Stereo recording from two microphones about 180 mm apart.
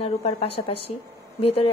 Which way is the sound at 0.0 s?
35° left (ahead or behind).